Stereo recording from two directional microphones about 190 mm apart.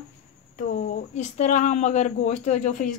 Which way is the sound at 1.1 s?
40° left (ahead or behind).